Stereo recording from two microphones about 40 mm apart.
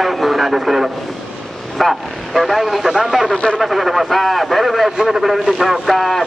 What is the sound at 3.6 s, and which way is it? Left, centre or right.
Speech, centre.